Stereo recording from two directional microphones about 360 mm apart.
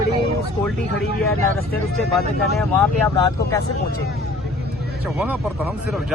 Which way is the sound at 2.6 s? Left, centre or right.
Centre.